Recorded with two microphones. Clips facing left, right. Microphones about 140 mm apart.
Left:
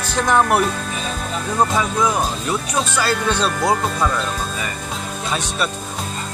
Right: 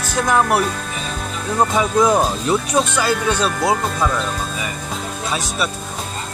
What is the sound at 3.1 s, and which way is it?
Speech, 10° right (ahead or behind).